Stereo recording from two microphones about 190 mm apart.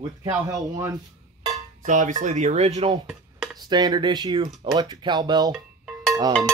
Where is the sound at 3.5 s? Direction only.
20° right (ahead or behind).